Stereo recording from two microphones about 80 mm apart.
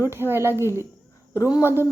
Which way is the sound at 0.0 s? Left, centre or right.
Right.